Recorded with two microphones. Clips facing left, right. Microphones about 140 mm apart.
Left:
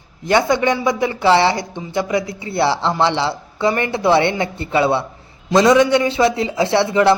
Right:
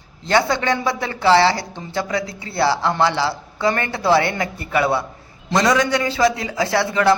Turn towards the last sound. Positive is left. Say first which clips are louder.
# left 3 dB
turn(degrees=25)  # may be behind; listen again after turning